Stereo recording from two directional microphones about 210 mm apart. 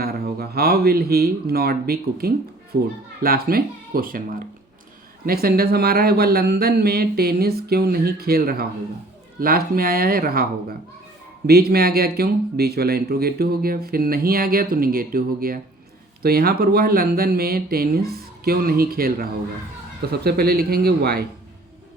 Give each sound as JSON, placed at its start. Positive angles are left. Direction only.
{"t": 0.0, "sound": "speech", "side_deg": -50}